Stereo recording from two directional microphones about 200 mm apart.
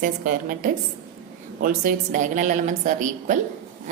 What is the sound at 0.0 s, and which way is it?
A woman's voice, 45° right (ahead or behind).